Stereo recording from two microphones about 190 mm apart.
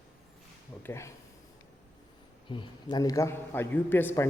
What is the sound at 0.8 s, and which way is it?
Speech, 15° left (ahead or behind).